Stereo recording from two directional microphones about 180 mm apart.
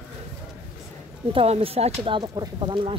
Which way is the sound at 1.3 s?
30° right (ahead or behind).